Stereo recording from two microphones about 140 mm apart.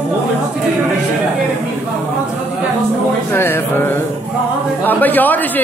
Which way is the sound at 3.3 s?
15° left (ahead or behind).